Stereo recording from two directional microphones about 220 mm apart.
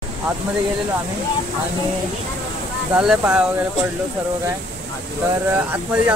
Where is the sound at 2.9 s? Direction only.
5° right (ahead or behind).